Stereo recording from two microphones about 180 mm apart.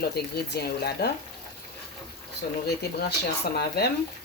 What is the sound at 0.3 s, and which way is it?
Speech, 60° left (ahead or behind).